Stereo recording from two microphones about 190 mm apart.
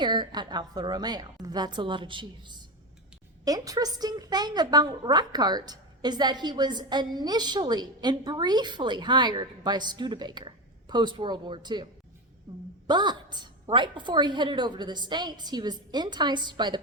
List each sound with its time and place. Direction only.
0.0 s a woman's voice: 25° right (ahead or behind)
12.9 s a woman's voice: 25° right (ahead or behind)